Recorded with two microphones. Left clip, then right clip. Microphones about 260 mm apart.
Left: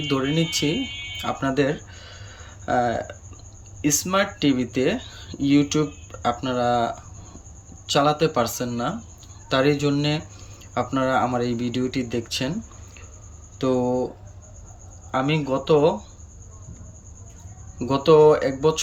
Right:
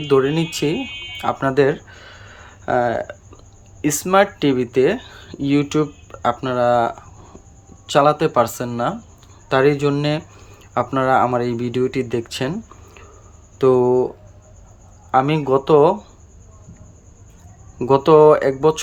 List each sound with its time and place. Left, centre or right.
0.1 s speech: centre
1.2 s a sound: centre
3.8 s speech: centre
15.1 s speech: centre
17.7 s speech: centre